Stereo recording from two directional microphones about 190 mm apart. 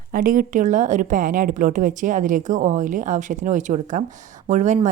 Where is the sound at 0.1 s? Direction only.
45° right (ahead or behind).